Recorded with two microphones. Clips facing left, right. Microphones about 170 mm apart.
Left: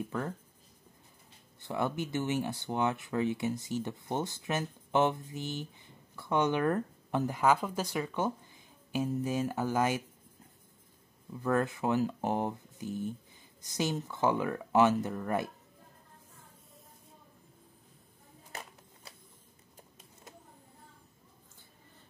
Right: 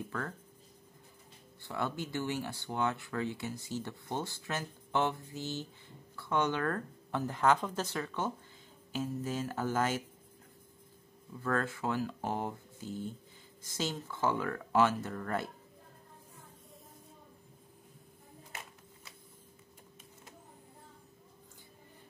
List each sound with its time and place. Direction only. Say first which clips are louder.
1.6 s speech: left 4 dB; 20° left (ahead or behind)
11.4 s speech: left 4 dB; 15° left (ahead or behind)